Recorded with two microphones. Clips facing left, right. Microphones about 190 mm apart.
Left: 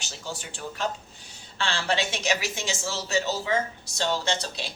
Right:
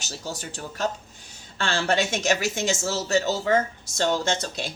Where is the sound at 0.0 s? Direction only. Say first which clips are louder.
Right 3 dB; 40° right (ahead or behind).